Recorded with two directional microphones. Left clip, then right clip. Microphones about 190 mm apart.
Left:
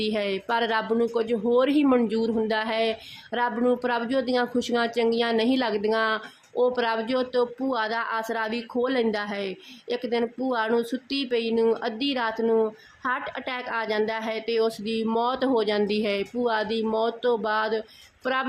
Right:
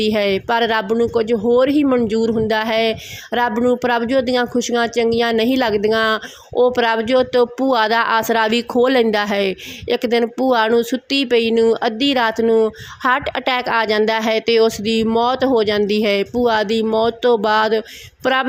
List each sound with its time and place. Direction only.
0.0 s speech: 35° right (ahead or behind)